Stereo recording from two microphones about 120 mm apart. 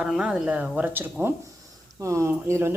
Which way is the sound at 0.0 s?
5° right (ahead or behind).